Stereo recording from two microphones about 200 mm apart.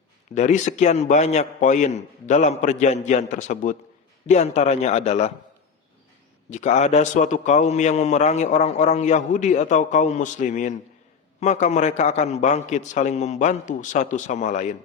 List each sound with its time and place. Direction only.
0.3 s a man's voice: 35° left (ahead or behind)
6.5 s a man's voice: 35° left (ahead or behind)